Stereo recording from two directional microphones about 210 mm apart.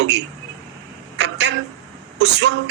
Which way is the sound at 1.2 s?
55° right (ahead or behind).